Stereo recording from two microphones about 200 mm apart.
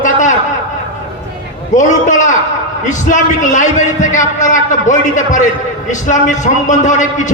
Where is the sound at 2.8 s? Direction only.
40° left (ahead or behind).